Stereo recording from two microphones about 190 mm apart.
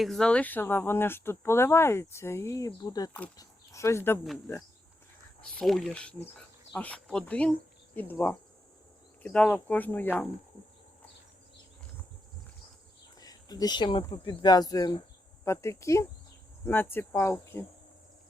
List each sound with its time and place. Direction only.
0.0 s speech: centre (ahead or behind)
5.4 s speech: 5° left (ahead or behind)
13.1 s a sound: 20° left (ahead or behind)
14.1 s speech: 25° left (ahead or behind)